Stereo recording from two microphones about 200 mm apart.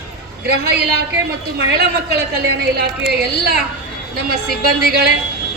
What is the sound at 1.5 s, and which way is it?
A woman's voice, 55° right (ahead or behind).